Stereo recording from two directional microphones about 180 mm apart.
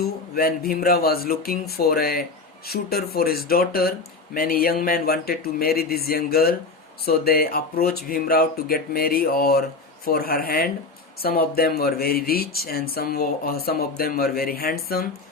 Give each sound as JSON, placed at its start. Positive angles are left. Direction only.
{"t": 0.0, "sound": "speech", "side_deg": 55}